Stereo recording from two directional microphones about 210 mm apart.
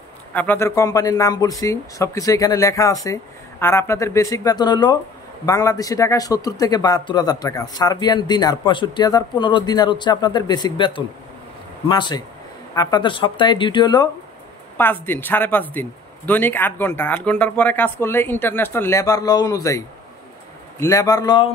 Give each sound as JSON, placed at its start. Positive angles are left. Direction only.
{"t": 0.3, "sound": "a man's voice", "side_deg": 10}
{"t": 14.8, "sound": "a man's voice", "side_deg": 10}
{"t": 20.8, "sound": "a man's voice", "side_deg": 15}